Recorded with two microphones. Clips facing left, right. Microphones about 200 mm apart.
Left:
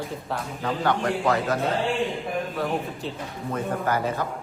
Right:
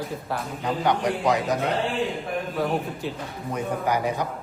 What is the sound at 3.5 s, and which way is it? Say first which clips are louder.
Speech: even; 15° right (ahead or behind).